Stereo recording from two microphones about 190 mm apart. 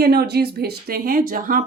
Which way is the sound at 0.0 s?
55° right (ahead or behind).